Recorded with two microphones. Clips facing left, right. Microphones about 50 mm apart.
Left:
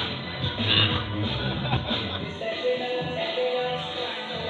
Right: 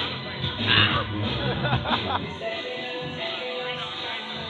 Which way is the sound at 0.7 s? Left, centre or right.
Right.